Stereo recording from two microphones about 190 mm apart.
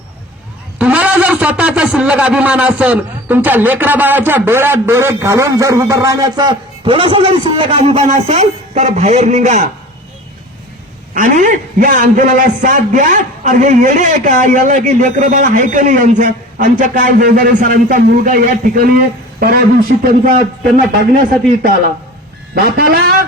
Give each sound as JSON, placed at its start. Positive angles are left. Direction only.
{"t": 0.8, "sound": "speech", "side_deg": -5}
{"t": 11.1, "sound": "a man's voice", "side_deg": -40}